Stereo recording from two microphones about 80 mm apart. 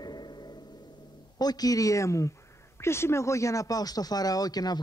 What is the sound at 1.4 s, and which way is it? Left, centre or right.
A man's voice, left.